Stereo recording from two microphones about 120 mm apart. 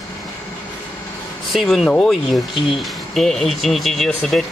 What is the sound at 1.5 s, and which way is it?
Speech, centre (ahead or behind).